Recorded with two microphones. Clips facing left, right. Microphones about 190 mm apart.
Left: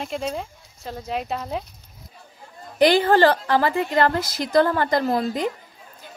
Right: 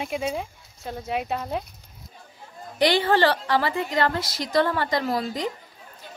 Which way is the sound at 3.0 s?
45° left (ahead or behind).